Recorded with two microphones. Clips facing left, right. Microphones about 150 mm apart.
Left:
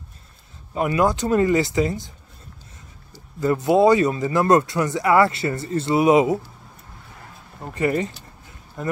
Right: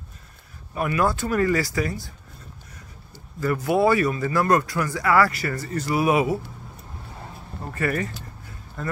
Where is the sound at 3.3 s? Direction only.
20° left (ahead or behind).